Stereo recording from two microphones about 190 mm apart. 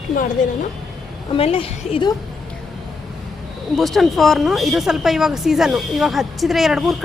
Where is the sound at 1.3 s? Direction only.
30° left (ahead or behind).